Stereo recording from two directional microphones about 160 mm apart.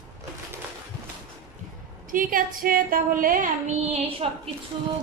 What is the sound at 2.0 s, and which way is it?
A woman's voice, 60° right (ahead or behind).